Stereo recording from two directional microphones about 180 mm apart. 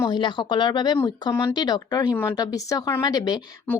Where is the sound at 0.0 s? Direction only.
25° left (ahead or behind).